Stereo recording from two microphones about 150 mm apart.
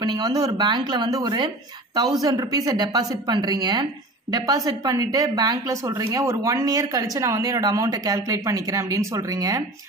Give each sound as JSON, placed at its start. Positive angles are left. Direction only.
{"t": 0.0, "sound": "speech", "side_deg": -30}